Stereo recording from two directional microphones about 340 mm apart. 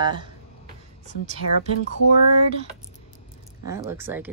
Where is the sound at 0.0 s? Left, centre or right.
Centre.